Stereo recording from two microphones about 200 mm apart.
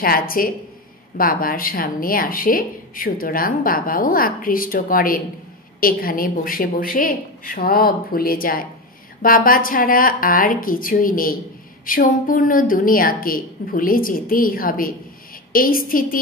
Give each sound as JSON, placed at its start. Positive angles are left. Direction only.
{"t": 0.0, "sound": "speech", "side_deg": 45}